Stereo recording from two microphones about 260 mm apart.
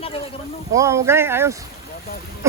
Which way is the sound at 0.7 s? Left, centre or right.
Centre.